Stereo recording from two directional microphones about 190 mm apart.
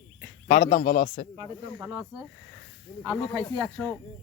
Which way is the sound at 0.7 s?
50° left (ahead or behind).